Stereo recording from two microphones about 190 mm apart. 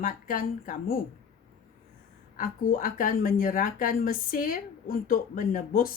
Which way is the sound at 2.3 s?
45° left (ahead or behind).